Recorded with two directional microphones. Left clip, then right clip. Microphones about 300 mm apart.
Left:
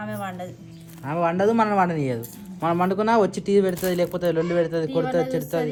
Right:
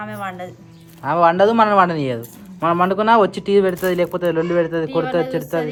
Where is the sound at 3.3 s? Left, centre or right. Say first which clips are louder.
Right 4 dB; centre.